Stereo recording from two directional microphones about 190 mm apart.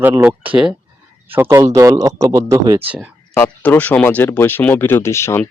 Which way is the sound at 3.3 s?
10° left (ahead or behind).